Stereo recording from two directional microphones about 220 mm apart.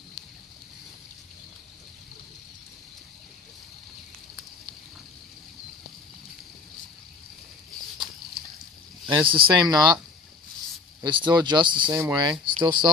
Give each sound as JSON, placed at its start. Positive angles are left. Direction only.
{"t": 9.1, "sound": "speech", "side_deg": -20}
{"t": 11.0, "sound": "speech", "side_deg": -20}